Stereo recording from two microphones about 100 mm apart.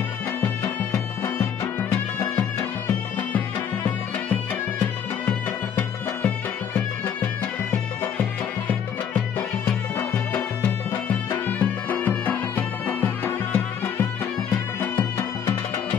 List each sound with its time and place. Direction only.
1.2 s music: 25° left (ahead or behind)
8.2 s music: 15° left (ahead or behind)
10.3 s music: 15° left (ahead or behind)
14.8 s music: 25° left (ahead or behind)